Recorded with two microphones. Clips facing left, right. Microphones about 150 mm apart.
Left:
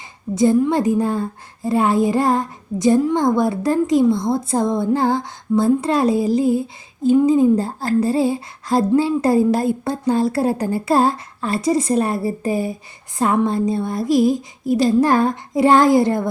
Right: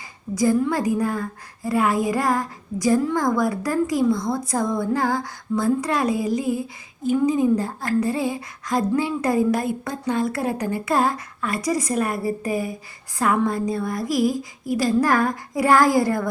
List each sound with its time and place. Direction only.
0.3 s a woman's voice: 25° left (ahead or behind)